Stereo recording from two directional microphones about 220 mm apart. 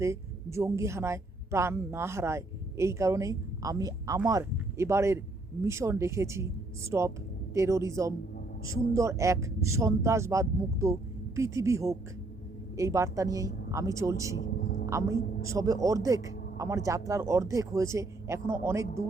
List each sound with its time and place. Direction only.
0.0 s a man's voice: 15° right (ahead or behind)
14.6 s a sound: 45° left (ahead or behind)
14.8 s a man's voice: 15° right (ahead or behind)